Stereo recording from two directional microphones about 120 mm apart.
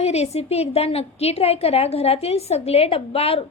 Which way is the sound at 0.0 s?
65° left (ahead or behind).